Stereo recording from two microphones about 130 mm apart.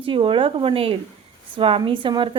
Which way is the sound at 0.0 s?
45° right (ahead or behind).